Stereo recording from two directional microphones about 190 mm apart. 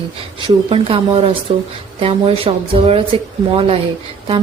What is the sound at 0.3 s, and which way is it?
A woman's voice, 25° right (ahead or behind).